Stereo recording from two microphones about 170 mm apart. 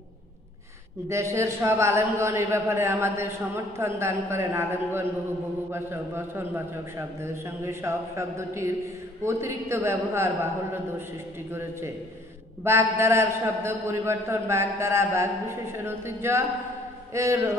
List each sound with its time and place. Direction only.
1.0 s a man's voice: 15° right (ahead or behind)
12.6 s a man's voice: 15° right (ahead or behind)